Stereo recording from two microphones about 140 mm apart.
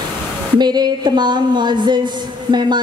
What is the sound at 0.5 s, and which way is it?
Speech, 30° right (ahead or behind).